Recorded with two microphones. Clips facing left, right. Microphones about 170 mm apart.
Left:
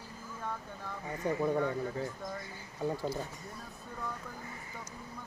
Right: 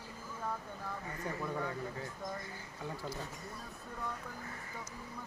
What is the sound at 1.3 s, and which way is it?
Speech, 25° left (ahead or behind).